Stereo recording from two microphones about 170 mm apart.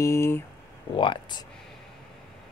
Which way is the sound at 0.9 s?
30° left (ahead or behind).